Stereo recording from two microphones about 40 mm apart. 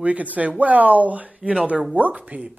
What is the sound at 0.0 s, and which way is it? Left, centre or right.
Speech, right.